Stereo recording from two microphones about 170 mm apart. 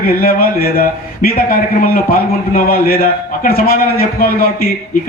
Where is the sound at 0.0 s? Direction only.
60° left (ahead or behind).